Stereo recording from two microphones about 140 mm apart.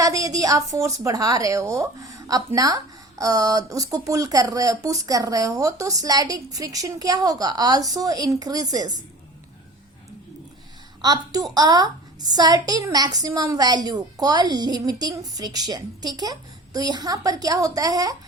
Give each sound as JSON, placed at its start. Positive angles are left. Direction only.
{"t": 0.0, "sound": "a woman's voice", "side_deg": -25}
{"t": 11.0, "sound": "a woman's voice", "side_deg": -30}